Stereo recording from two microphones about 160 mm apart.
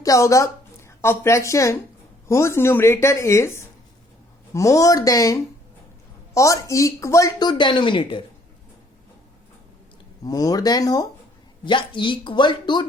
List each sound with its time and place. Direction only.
0.0 s a woman's voice: 20° left (ahead or behind)
10.2 s speech: 25° left (ahead or behind)